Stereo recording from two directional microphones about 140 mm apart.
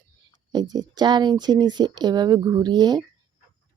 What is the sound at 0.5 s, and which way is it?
Speech, 30° right (ahead or behind).